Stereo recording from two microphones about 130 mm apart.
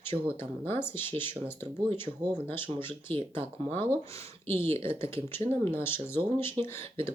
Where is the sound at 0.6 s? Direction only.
20° left (ahead or behind).